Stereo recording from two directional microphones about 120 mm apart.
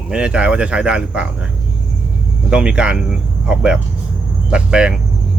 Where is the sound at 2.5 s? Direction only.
5° right (ahead or behind).